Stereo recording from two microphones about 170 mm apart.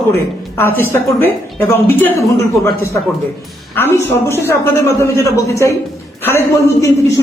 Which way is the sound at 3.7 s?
15° left (ahead or behind).